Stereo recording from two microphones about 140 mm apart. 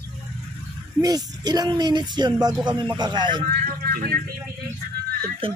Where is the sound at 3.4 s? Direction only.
90° right.